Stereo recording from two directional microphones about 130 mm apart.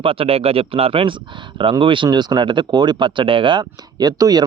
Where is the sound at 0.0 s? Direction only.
45° right (ahead or behind).